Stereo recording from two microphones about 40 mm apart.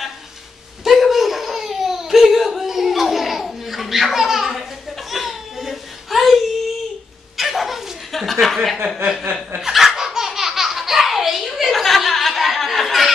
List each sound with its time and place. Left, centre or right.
0.8 s crying: centre
5.1 s a sound: centre
7.3 s chuckle: centre
8.8 s chuckle: centre
9.6 s laughter: centre